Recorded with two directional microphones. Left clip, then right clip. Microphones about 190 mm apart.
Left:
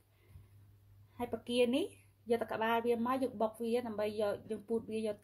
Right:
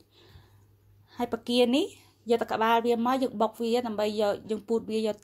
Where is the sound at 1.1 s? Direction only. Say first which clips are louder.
Right 8 dB; 45° right (ahead or behind).